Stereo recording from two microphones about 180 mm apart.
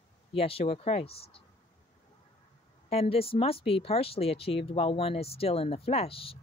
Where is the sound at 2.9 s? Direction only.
35° left (ahead or behind).